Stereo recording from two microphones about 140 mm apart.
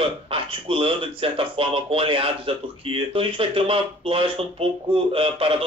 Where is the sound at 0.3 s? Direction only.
40° right (ahead or behind).